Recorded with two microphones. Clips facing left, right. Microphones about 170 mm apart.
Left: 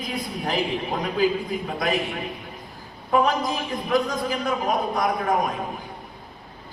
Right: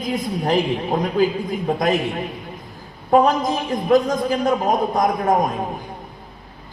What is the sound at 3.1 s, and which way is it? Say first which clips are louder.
A man's voice: right 5 dB; 45° right (ahead or behind).